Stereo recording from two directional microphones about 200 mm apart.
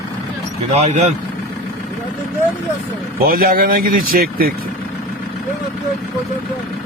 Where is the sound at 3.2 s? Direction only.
45° right (ahead or behind).